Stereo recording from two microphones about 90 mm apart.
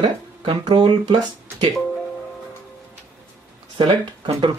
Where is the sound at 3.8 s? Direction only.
65° right (ahead or behind).